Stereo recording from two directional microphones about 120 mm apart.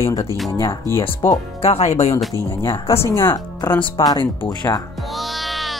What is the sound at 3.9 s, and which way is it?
Speech, 35° left (ahead or behind).